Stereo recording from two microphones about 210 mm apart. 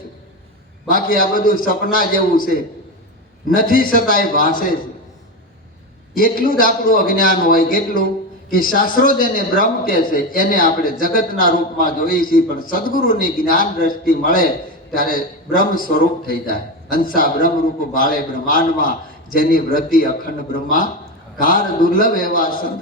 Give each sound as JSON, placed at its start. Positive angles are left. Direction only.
{"t": 0.9, "sound": "a man's voice", "side_deg": 40}
{"t": 6.1, "sound": "a man's voice", "side_deg": 40}